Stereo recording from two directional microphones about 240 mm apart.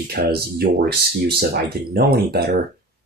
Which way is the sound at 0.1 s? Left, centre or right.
Right.